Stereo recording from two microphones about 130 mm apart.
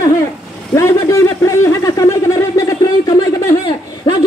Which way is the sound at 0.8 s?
25° left (ahead or behind).